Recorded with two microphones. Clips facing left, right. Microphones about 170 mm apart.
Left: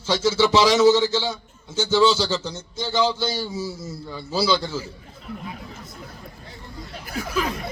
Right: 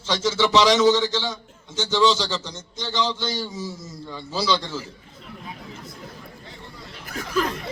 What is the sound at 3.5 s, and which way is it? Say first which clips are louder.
Speech: left 3 dB; 30° left (ahead or behind).